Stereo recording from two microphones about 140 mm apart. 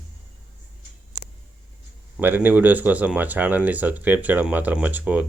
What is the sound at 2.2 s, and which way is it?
Speech, 10° right (ahead or behind).